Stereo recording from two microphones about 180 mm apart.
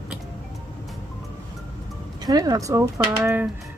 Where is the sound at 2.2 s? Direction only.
20° right (ahead or behind).